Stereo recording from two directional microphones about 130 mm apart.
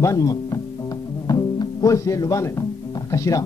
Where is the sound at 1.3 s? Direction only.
25° left (ahead or behind).